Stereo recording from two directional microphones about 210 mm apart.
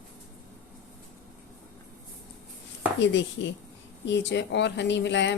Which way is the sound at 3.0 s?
60° left (ahead or behind).